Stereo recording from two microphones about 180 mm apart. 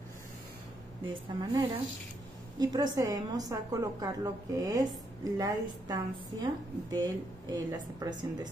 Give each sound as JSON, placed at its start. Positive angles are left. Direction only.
{"t": 1.0, "sound": "a woman's voice", "side_deg": -25}